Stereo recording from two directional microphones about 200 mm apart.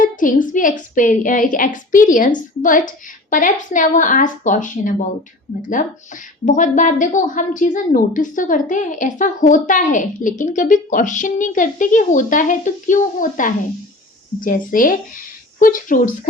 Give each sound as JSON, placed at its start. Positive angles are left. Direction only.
{"t": 0.0, "sound": "a woman's voice", "side_deg": 40}
{"t": 6.4, "sound": "a woman's voice", "side_deg": 40}